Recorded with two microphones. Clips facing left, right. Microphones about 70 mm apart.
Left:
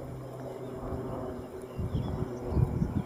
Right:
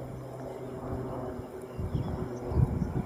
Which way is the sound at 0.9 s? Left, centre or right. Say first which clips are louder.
Even; centre.